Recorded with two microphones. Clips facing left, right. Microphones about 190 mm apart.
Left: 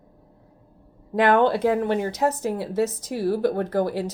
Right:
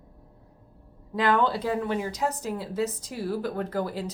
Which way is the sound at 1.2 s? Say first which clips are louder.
Left 6 dB; 60° left (ahead or behind).